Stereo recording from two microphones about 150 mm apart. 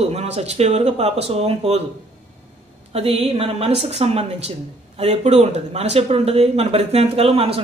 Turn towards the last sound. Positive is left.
turn(degrees=-40)  # may be behind; listen again after turning